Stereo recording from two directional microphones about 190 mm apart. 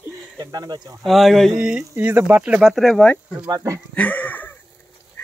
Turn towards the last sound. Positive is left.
turn(degrees=10)  # may be behind; listen again after turning